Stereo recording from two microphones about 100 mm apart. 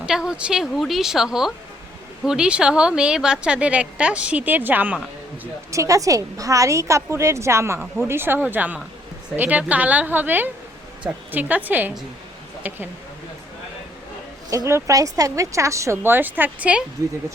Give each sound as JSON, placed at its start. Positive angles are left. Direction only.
{"t": 0.0, "sound": "a woman's voice", "side_deg": -5}
{"t": 5.7, "sound": "a woman's voice", "side_deg": -35}
{"t": 14.5, "sound": "speech", "side_deg": -30}